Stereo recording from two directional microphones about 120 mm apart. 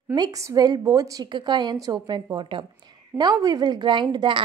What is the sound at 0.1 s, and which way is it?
A woman's voice, 30° right (ahead or behind).